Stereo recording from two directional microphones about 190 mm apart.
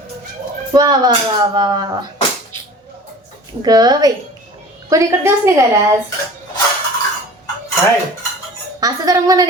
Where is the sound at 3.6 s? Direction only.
20° right (ahead or behind).